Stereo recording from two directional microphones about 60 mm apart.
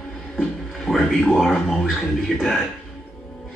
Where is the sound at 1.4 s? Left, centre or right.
Centre.